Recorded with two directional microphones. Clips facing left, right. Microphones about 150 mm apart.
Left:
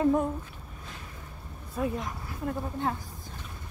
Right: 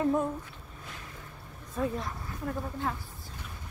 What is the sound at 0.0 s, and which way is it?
Speech, 15° left (ahead or behind).